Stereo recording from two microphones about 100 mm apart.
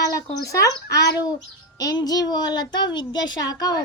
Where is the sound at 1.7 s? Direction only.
40° left (ahead or behind).